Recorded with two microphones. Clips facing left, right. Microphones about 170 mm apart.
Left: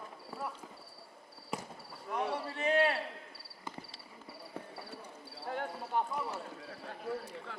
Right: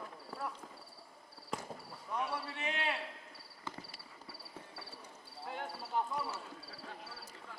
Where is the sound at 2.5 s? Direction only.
40° left (ahead or behind).